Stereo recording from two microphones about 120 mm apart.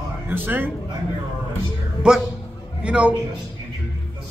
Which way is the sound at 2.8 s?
10° right (ahead or behind).